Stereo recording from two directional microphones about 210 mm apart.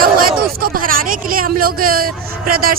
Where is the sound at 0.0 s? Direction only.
45° right (ahead or behind).